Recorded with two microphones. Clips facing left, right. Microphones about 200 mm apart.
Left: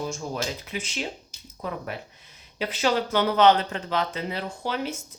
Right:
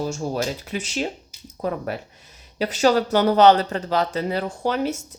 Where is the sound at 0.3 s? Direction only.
45° right (ahead or behind).